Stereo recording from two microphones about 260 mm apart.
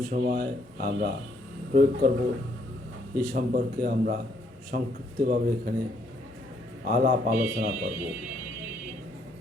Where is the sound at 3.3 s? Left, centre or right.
Right.